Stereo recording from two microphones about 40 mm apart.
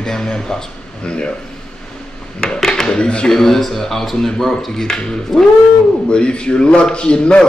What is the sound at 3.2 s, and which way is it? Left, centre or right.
A man's voice, centre.